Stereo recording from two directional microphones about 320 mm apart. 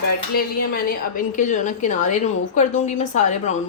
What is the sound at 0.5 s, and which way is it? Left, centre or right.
A woman's voice, left.